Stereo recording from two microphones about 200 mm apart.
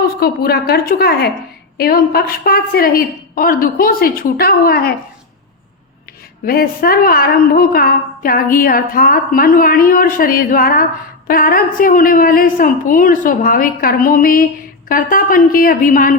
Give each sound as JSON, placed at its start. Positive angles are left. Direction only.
{"t": 0.2, "sound": "a woman's voice", "side_deg": 50}
{"t": 6.4, "sound": "a woman's voice", "side_deg": 50}